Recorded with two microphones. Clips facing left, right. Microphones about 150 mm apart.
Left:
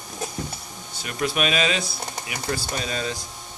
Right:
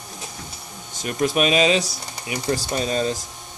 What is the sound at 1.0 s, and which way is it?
Speech, 40° right (ahead or behind).